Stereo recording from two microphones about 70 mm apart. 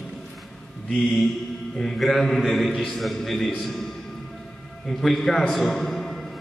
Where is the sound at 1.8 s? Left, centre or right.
Centre.